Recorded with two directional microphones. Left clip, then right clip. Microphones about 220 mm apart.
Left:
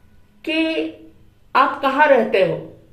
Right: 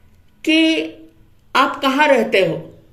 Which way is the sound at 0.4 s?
50° right (ahead or behind).